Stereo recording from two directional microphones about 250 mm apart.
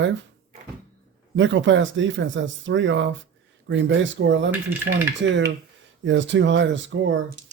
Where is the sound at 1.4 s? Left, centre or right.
Right.